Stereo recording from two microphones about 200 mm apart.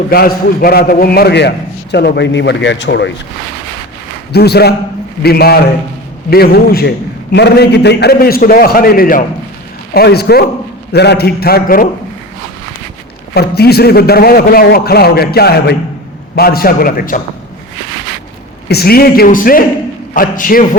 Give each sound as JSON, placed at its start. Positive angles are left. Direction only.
{"t": 0.1, "sound": "a man's voice", "side_deg": 50}
{"t": 4.3, "sound": "a man's voice", "side_deg": 55}
{"t": 13.3, "sound": "a man's voice", "side_deg": 55}
{"t": 18.7, "sound": "a man's voice", "side_deg": 50}